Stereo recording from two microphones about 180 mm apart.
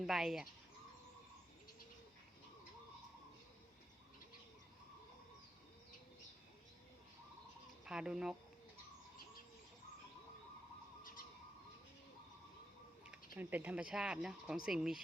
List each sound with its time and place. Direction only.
0.0 s speech: centre (ahead or behind)
7.9 s speech: 5° right (ahead or behind)
11.0 s bird: 50° left (ahead or behind)
13.3 s speech: 10° right (ahead or behind)